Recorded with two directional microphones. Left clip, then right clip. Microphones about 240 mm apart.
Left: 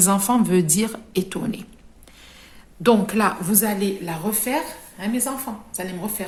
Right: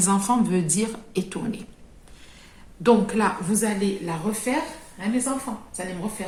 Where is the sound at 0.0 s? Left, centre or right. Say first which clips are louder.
Left 2 dB; left.